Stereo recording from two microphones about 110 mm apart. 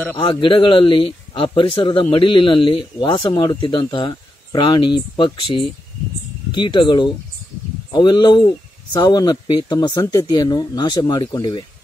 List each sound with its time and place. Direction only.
0.2 s a man's voice: 50° left (ahead or behind)